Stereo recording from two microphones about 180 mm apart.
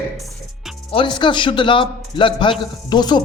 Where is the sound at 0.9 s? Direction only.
25° left (ahead or behind).